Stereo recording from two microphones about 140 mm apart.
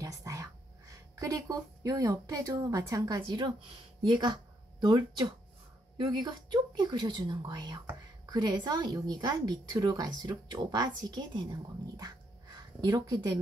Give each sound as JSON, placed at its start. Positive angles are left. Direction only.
{"t": 0.0, "sound": "a woman's voice", "side_deg": -25}